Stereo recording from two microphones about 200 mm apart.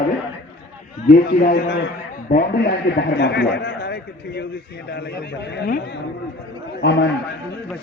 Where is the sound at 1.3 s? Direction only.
55° left (ahead or behind).